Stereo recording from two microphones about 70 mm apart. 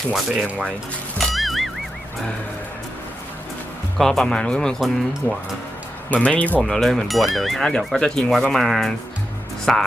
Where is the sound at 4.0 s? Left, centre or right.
Centre.